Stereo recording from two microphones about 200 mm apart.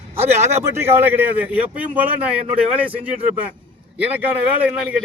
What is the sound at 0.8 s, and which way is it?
A man's voice, 10° right (ahead or behind).